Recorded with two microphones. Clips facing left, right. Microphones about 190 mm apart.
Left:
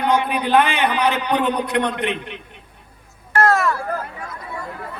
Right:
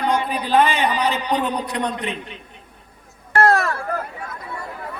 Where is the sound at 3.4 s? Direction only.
35° right (ahead or behind).